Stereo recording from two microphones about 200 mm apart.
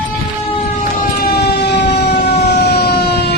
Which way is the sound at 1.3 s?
55° left (ahead or behind).